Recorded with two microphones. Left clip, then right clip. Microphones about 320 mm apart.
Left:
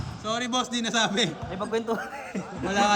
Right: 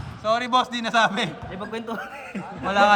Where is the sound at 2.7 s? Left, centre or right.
Centre.